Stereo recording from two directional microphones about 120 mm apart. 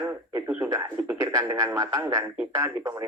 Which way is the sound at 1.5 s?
30° right (ahead or behind).